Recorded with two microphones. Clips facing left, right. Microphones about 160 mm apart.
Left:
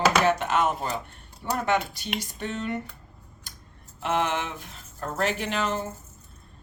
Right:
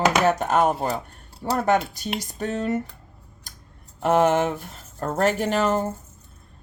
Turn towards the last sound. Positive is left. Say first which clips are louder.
# right 6 dB
turn(degrees=-45)  # may be behind; listen again after turning